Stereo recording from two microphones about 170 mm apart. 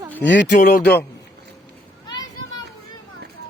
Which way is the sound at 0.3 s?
90° left.